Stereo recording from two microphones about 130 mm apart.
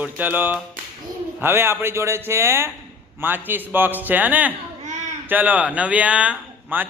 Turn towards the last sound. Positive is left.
turn(degrees=-10)  # may be behind; listen again after turning